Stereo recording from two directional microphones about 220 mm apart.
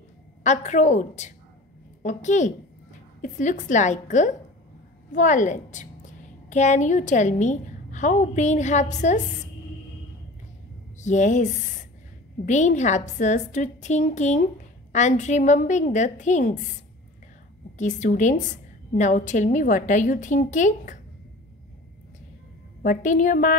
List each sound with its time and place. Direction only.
0.4 s a woman's voice: 30° left (ahead or behind)
11.0 s a woman's voice: 35° left (ahead or behind)
17.7 s a woman's voice: 35° left (ahead or behind)
22.8 s a woman's voice: 40° left (ahead or behind)